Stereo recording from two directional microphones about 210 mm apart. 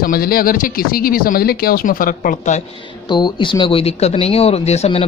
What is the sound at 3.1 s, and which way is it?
Speech, 20° left (ahead or behind).